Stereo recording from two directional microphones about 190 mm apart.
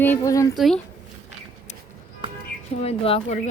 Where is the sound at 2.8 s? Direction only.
30° left (ahead or behind).